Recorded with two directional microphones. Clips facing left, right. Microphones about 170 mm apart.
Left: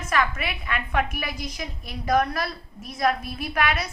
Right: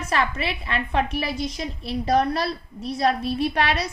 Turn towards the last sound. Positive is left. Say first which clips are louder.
# right 3 dB
turn(degrees=-30)  # may be behind; listen again after turning